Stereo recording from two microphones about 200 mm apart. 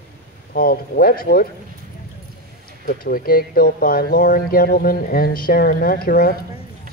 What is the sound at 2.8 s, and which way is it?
Speech, 45° left (ahead or behind).